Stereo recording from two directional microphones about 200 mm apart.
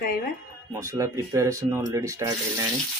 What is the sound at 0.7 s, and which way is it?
Speech, 15° right (ahead or behind).